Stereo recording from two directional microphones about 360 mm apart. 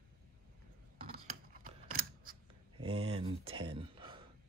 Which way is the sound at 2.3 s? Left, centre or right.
Centre.